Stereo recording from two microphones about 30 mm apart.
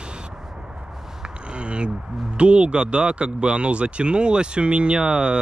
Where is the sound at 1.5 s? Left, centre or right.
Right.